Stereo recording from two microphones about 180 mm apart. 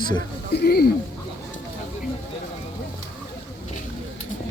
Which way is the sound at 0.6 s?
60° left (ahead or behind).